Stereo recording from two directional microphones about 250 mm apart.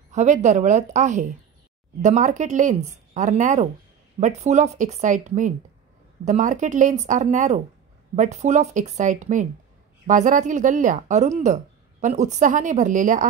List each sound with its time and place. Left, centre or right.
0.1 s speech: right